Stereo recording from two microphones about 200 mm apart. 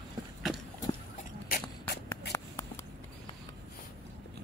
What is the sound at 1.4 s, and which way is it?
Beatboxing, 50° left (ahead or behind).